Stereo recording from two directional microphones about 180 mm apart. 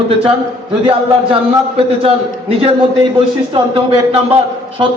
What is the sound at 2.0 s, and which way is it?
A man's voice, 30° right (ahead or behind).